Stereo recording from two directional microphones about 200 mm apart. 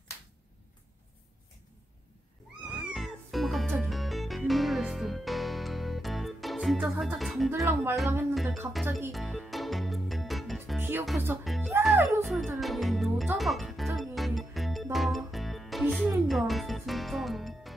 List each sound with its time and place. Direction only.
2.7 s music: centre (ahead or behind)
7.5 s speech: 15° right (ahead or behind)
9.1 s music: centre (ahead or behind)
10.8 s music: 10° right (ahead or behind)
11.1 s speech: 5° right (ahead or behind)
12.3 s speech: centre (ahead or behind)
13.9 s music: centre (ahead or behind)